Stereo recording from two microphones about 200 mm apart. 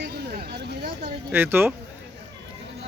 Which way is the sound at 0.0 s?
50° right (ahead or behind).